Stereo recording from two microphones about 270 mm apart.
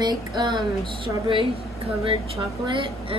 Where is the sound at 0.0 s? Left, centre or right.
Centre.